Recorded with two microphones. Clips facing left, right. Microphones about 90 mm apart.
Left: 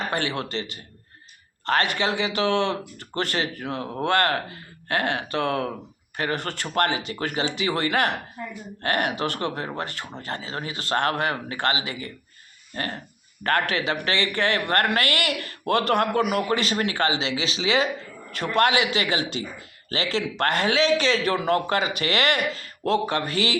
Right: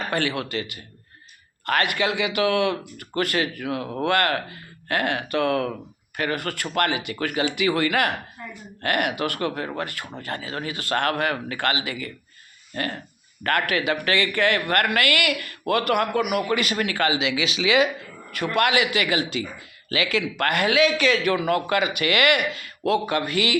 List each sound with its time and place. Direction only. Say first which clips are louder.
0.0 s speech: right 1 dB; 25° left (ahead or behind)